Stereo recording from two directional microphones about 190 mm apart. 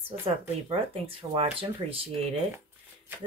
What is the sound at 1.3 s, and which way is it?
Speech, 30° right (ahead or behind).